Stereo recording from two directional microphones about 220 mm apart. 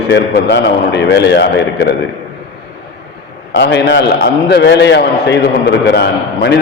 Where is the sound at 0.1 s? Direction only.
50° left (ahead or behind).